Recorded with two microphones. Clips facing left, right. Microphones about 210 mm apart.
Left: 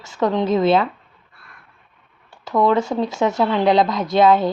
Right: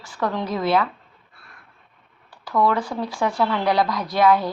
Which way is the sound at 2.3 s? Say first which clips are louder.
Left 4 dB; 25° left (ahead or behind).